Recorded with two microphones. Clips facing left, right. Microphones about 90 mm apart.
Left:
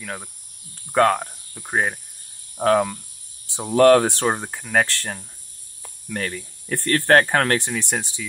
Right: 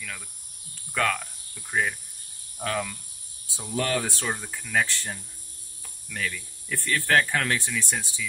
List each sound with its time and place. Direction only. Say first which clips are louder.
0.0 s speech: left 7 dB; 45° left (ahead or behind)
3.4 s speech: left 15 dB; 65° left (ahead or behind)
4.8 s speech: left 4 dB; 80° left
6.1 s speech: left 4 dB; 50° left (ahead or behind)